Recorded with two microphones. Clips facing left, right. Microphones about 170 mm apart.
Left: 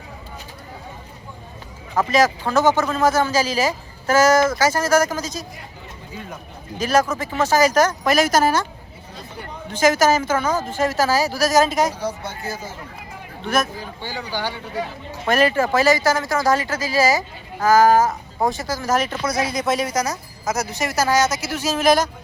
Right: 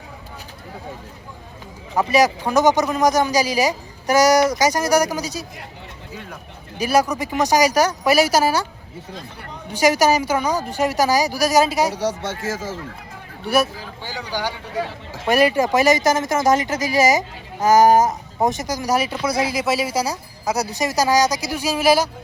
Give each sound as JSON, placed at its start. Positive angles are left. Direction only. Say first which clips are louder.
{"t": 2.0, "sound": "speech", "louder": "right 1 dB", "side_deg": -15}
{"t": 6.7, "sound": "speech", "louder": "right 1 dB", "side_deg": -10}
{"t": 9.7, "sound": "speech", "louder": "even", "side_deg": -15}
{"t": 11.9, "sound": "speech", "louder": "right 3 dB", "side_deg": -80}
{"t": 13.4, "sound": "speech", "louder": "right 3 dB", "side_deg": -10}